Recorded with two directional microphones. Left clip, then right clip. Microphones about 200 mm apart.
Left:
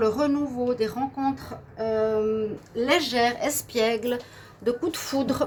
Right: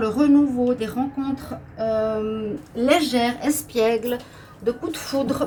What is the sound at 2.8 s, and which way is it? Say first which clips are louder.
A woman's voice: right 3 dB; 55° left (ahead or behind).